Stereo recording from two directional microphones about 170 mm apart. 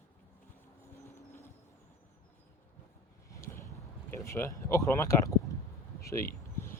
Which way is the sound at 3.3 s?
15° left (ahead or behind).